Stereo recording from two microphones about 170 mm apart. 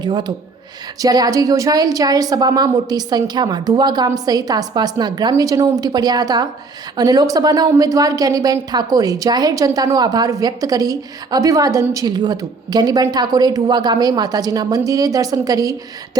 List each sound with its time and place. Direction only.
0.0 s a woman's voice: 25° right (ahead or behind)